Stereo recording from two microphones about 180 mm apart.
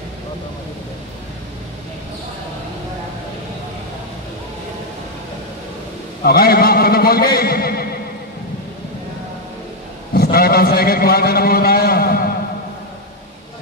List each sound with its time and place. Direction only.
6.2 s a man's voice: 55° left (ahead or behind)
10.1 s a man's voice: 60° left (ahead or behind)